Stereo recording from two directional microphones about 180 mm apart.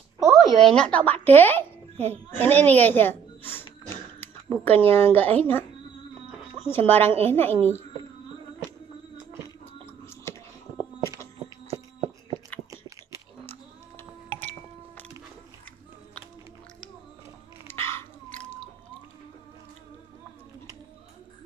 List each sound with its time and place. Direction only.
0.3 s a child's voice: centre (ahead or behind)
6.7 s a woman's voice: 10° left (ahead or behind)
9.8 s chewing: 15° left (ahead or behind)
11.7 s a sound: 30° right (ahead or behind)
17.6 s dog: 15° left (ahead or behind)